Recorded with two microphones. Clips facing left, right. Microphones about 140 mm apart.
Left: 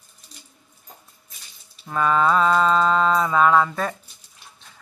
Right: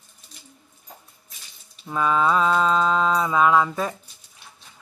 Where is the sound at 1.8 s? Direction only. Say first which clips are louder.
Left 1 dB; 5° right (ahead or behind).